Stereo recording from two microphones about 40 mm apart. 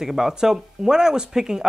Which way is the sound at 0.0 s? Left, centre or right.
Centre.